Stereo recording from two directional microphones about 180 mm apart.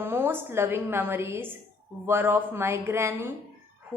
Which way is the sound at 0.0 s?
10° right (ahead or behind).